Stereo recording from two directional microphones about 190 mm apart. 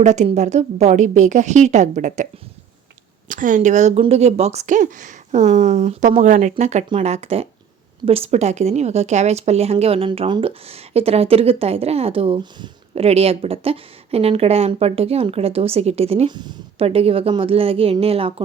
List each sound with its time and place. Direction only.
0.0 s speech: 40° right (ahead or behind)
3.2 s speech: 45° right (ahead or behind)